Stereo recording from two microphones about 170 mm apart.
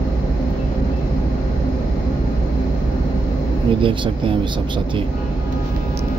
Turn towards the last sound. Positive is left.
turn(degrees=-30)  # may be behind; listen again after turning